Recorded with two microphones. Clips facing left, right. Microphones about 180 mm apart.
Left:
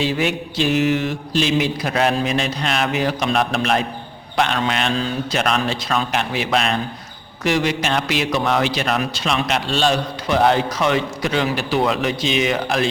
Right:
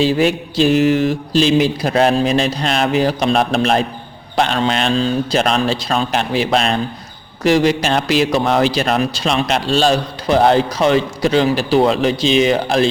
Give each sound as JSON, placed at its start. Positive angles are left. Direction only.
{"t": 0.0, "sound": "a man's voice", "side_deg": -35}